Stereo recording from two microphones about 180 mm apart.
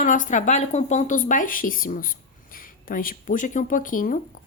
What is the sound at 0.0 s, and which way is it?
Speech, 45° left (ahead or behind).